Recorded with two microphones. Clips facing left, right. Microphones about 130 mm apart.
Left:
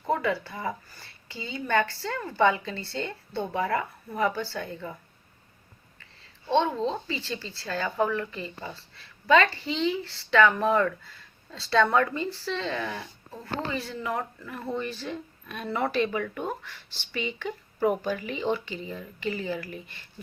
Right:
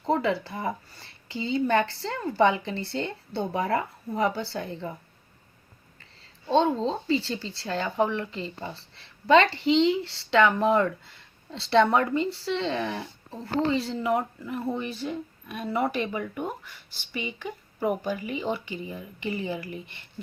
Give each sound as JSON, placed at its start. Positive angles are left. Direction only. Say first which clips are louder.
{"t": 0.0, "sound": "speech", "louder": "right 2 dB", "side_deg": -25}
{"t": 6.6, "sound": "speech", "louder": "right 2 dB", "side_deg": -25}